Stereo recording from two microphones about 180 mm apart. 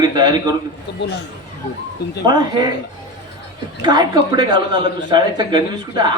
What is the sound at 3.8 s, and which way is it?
A man's voice, 25° right (ahead or behind).